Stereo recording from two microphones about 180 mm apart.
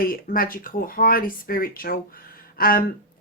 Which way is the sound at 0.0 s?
55° left (ahead or behind).